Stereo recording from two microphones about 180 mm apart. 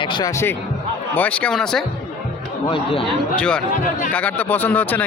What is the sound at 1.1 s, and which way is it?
Speech, 5° left (ahead or behind).